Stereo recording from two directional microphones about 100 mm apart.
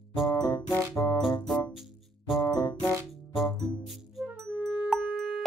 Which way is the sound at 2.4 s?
35° left (ahead or behind).